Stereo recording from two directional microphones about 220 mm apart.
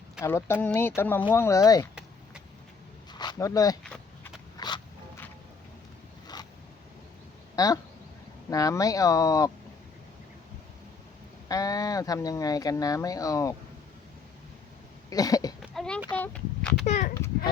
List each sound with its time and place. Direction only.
0.2 s speech: 10° left (ahead or behind)
3.1 s speech: 20° left (ahead or behind)
4.5 s a sound: 20° left (ahead or behind)
7.5 s speech: 15° left (ahead or behind)
11.4 s speech: 15° left (ahead or behind)
15.1 s cough: 15° left (ahead or behind)
15.6 s a sound: centre (ahead or behind)
16.8 s a child's voice: 30° left (ahead or behind)
17.2 s a sound: 10° left (ahead or behind)